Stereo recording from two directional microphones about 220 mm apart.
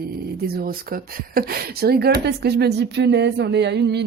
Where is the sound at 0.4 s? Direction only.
45° right (ahead or behind).